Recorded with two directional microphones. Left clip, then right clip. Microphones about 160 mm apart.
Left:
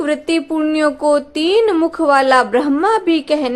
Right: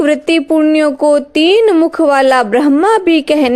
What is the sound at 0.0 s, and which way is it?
A woman's voice, 45° right (ahead or behind).